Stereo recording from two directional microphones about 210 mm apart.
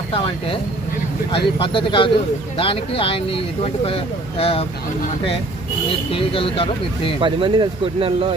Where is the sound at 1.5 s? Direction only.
25° left (ahead or behind).